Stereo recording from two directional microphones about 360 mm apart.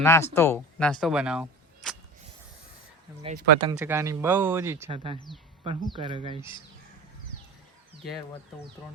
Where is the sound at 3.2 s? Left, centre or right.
Right.